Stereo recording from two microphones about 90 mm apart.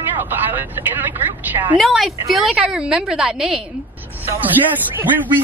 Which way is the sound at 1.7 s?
Centre (ahead or behind).